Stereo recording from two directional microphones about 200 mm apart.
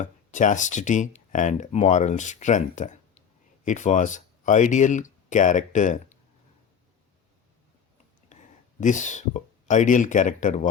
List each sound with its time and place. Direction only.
0.0 s speech: 40° left (ahead or behind)
8.3 s speech: 35° left (ahead or behind)